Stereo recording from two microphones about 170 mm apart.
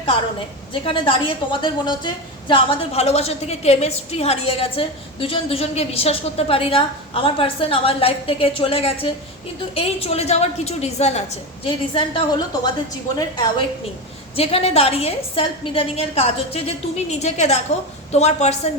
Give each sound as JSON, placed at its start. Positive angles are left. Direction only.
{"t": 0.7, "sound": "a woman's voice", "side_deg": 30}
{"t": 2.5, "sound": "a woman's voice", "side_deg": 35}